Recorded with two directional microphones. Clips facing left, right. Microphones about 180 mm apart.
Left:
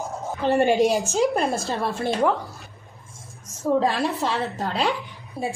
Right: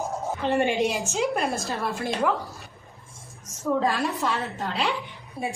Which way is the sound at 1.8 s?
30° left (ahead or behind).